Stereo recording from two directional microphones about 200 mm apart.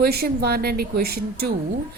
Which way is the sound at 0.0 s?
50° right (ahead or behind).